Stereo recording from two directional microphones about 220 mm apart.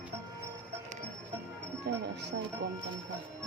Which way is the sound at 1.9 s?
50° right (ahead or behind).